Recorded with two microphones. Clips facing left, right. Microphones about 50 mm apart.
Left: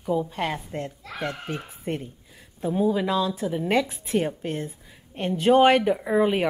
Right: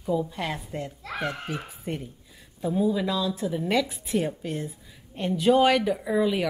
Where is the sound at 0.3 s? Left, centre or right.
Left.